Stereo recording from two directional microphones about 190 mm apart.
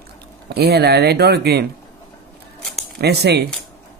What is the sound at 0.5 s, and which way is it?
Speech, 55° right (ahead or behind).